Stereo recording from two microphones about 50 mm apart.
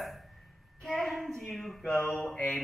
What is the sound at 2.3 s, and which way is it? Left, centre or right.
Mantra, left.